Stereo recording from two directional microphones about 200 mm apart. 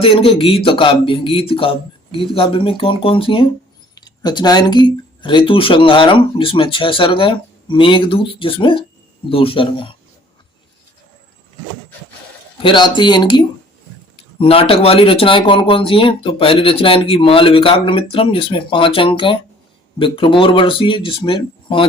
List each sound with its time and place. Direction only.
0.0 s speech: 30° left (ahead or behind)
12.6 s speech: 25° left (ahead or behind)